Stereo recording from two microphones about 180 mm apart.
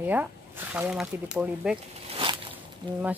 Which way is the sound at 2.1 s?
30° right (ahead or behind).